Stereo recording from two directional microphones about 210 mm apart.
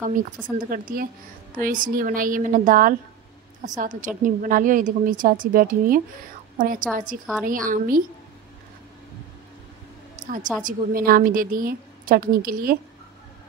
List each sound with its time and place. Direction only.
0.2 s a woman's voice: 40° right (ahead or behind)
10.2 s a woman's voice: 40° right (ahead or behind)